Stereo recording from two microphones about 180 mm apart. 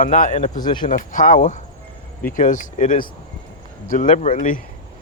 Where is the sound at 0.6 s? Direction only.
25° left (ahead or behind).